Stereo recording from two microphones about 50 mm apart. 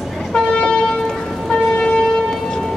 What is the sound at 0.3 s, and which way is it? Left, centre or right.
Vehicle, centre.